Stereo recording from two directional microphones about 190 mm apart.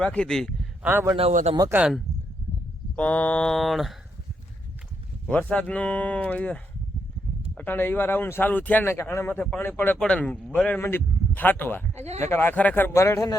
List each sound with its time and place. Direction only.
0.0 s a man's voice: 5° left (ahead or behind)
0.9 s a man's voice: 10° right (ahead or behind)
1.1 s a man's voice: 35° right (ahead or behind)
1.7 s mantra: 5° right (ahead or behind)
2.9 s mantra: 5° left (ahead or behind)
5.3 s speech: 5° left (ahead or behind)
12.0 s a man's voice: 35° right (ahead or behind)
12.3 s speech: 10° left (ahead or behind)